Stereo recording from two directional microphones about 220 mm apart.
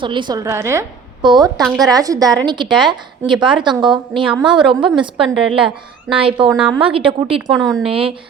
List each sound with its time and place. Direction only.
0.0 s a woman's voice: 20° right (ahead or behind)
1.6 s a woman's voice: centre (ahead or behind)
1.9 s a woman's voice: 15° right (ahead or behind)
4.4 s a woman's voice: centre (ahead or behind)
4.9 s a woman's voice: 25° right (ahead or behind)
7.6 s a woman's voice: centre (ahead or behind)
7.9 s a woman's voice: 25° right (ahead or behind)